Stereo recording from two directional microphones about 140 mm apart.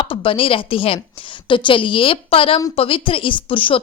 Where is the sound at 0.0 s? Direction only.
40° left (ahead or behind).